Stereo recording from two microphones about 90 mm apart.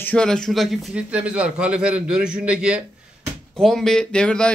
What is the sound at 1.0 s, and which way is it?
A man's voice, 15° right (ahead or behind).